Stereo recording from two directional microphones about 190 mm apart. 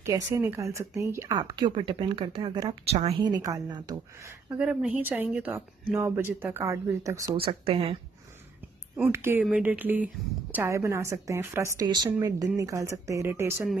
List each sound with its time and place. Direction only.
0.0 s a woman's voice: 15° right (ahead or behind)
4.5 s a woman's voice: 5° right (ahead or behind)
7.3 s speech: 30° right (ahead or behind)
9.1 s a woman's voice: 10° right (ahead or behind)